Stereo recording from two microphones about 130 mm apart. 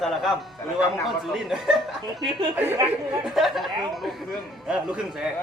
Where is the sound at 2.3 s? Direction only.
35° right (ahead or behind).